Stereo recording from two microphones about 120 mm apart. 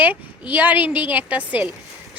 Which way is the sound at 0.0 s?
15° right (ahead or behind).